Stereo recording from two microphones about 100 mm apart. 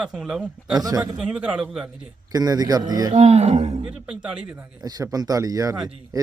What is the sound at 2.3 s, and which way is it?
Speech, 40° right (ahead or behind).